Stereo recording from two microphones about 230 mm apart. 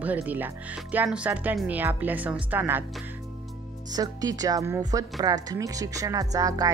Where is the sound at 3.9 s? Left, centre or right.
Centre.